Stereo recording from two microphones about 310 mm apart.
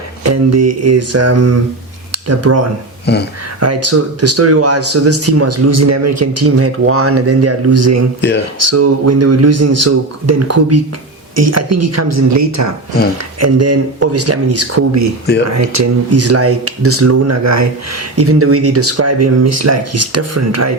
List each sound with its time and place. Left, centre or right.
0.2 s speech: right
3.1 s speech: left
3.6 s speech: right
13.4 s speech: right